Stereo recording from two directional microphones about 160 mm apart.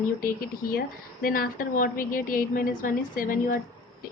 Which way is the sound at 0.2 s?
60° left (ahead or behind).